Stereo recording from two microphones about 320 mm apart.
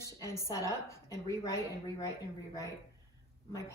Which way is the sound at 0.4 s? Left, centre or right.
Centre.